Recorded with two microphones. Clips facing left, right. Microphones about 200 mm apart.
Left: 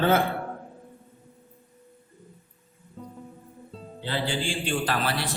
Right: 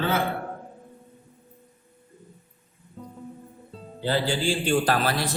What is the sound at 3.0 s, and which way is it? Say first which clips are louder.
Music: even; centre (ahead or behind).